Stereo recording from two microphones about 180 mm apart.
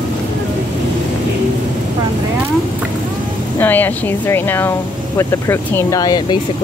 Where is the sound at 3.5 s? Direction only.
10° left (ahead or behind).